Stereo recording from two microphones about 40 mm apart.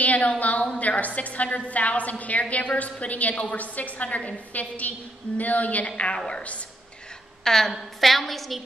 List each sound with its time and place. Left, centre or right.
0.0 s a sound: left
0.4 s a woman's voice: left
7.4 s a woman's voice: centre